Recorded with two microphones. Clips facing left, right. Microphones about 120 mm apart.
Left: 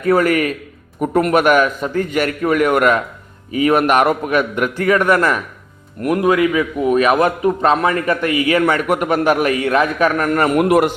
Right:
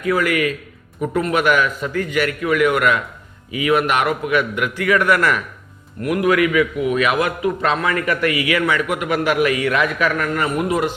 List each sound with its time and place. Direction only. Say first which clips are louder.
0.0 s a man's voice: left 4 dB; 40° left (ahead or behind)
10.2 s a man's voice: left 5 dB; 50° left (ahead or behind)
10.5 s a man's voice: left 6 dB; 65° left (ahead or behind)